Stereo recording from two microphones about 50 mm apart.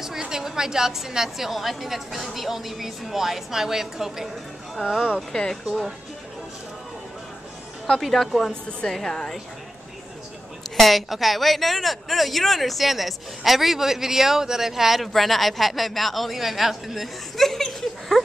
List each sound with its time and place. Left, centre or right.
0.0 s a woman's voice: centre
5.3 s a woman's voice: centre
7.8 s a woman's voice: centre
10.8 s speech: centre